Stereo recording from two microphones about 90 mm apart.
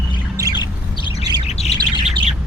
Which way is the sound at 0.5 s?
60° left (ahead or behind).